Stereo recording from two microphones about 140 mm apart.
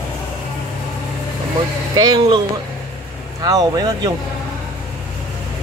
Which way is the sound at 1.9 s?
30° right (ahead or behind).